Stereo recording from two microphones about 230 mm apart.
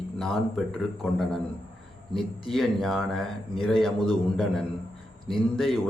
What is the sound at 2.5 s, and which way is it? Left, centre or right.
A man's voice, centre.